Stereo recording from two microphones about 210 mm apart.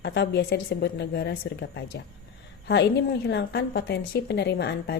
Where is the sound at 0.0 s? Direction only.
55° left (ahead or behind).